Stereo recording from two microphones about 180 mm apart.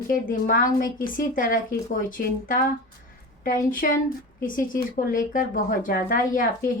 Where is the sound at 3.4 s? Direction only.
50° left (ahead or behind).